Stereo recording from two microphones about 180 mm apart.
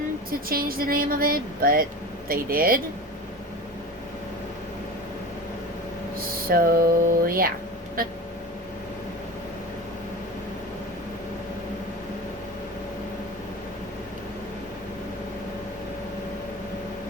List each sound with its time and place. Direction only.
0.3 s speech: 55° right (ahead or behind)
6.5 s a sound: 55° right (ahead or behind)
8.0 s speech: 55° right (ahead or behind)